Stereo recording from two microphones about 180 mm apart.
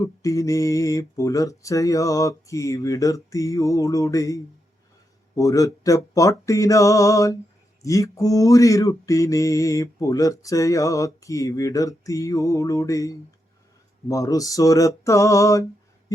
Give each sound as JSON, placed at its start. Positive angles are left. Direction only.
{"t": 0.0, "sound": "male singing", "side_deg": 20}